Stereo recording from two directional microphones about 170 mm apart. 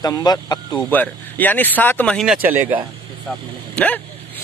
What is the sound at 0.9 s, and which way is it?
Speech, 10° left (ahead or behind).